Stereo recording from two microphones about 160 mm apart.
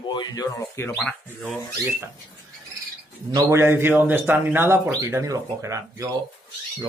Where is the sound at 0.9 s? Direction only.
Centre (ahead or behind).